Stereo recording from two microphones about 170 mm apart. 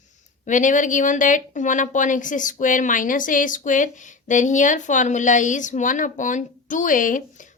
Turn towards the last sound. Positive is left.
turn(degrees=50)  # may be behind; listen again after turning